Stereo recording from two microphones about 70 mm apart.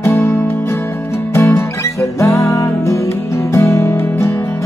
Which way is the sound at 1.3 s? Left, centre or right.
Left.